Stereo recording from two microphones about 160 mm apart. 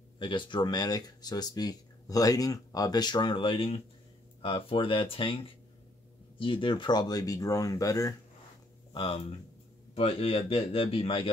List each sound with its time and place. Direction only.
0.2 s speech: 30° left (ahead or behind)
8.9 s speech: 35° left (ahead or behind)